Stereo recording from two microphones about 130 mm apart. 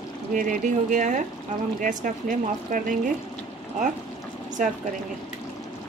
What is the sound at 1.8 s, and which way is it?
Speech, 85° right.